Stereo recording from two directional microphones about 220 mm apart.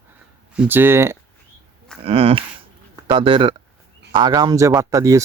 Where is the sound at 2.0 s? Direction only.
25° right (ahead or behind).